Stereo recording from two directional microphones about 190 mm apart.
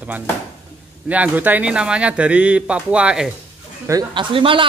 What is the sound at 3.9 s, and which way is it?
Speech, 20° right (ahead or behind).